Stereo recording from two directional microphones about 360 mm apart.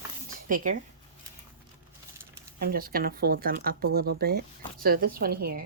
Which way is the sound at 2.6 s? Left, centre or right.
Right.